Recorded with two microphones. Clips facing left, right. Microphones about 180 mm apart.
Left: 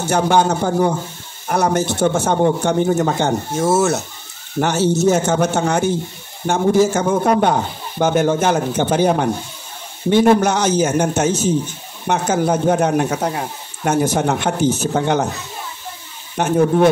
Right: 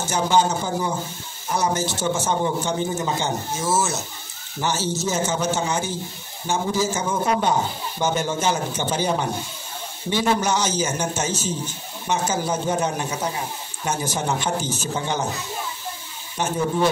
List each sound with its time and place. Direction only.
0.0 s a man's voice: 60° left (ahead or behind)
16.3 s a man's voice: 60° left (ahead or behind)